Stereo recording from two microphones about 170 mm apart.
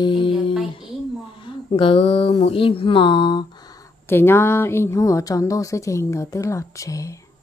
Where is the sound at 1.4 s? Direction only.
30° left (ahead or behind).